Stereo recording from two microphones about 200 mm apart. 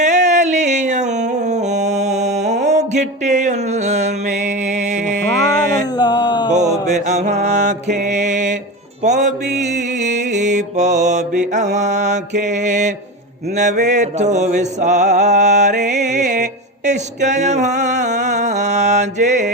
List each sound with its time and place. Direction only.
0.0 s a sound: 35° right (ahead or behind)
6.0 s mantra: 20° left (ahead or behind)
6.6 s mantra: 35° right (ahead or behind)
13.6 s music: 35° right (ahead or behind)